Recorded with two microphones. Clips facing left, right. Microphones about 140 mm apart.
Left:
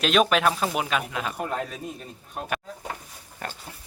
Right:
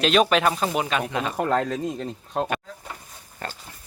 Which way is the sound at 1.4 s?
90° right.